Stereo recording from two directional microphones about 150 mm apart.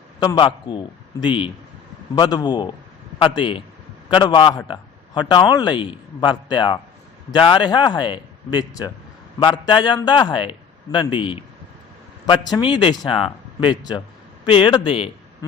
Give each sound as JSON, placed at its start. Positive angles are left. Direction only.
{"t": 0.2, "sound": "a man's voice", "side_deg": 30}